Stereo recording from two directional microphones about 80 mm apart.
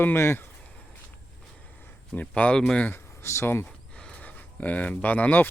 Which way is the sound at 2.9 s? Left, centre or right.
Left.